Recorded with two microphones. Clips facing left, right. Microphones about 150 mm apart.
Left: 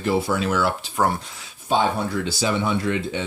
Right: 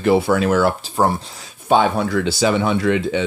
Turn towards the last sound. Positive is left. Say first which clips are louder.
# right 6 dB
turn(degrees=-90)